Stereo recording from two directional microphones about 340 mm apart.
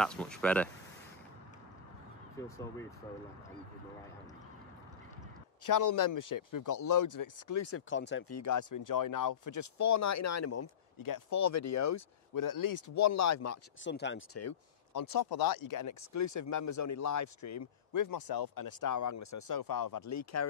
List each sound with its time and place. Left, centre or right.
0.0 s speech: centre
2.4 s speech: centre
5.7 s speech: left
7.6 s speech: left
8.3 s speech: left
11.0 s speech: left
13.8 s speech: left
15.0 s speech: left
20.0 s speech: left